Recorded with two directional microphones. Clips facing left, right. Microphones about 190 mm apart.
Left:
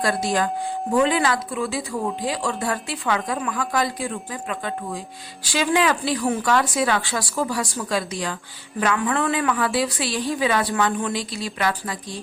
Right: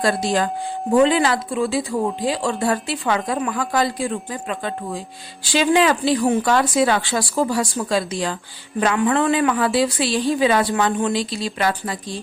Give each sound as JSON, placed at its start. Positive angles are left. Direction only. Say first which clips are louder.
{"t": 0.0, "sound": "a woman's voice", "louder": "right 2 dB", "side_deg": -25}